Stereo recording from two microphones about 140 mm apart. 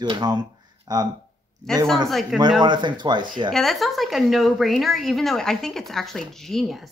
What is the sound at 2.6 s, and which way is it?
Speech, 35° right (ahead or behind).